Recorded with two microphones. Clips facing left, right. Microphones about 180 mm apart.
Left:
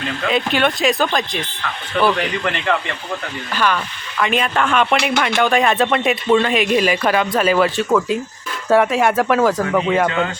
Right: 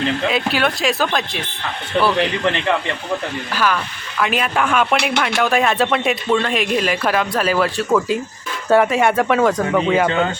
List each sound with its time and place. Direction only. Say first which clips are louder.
0.3 s speech: left 6 dB; 5° right (ahead or behind)
2.0 s speech: even; 25° right (ahead or behind)
3.5 s speech: left 1 dB; 5° right (ahead or behind)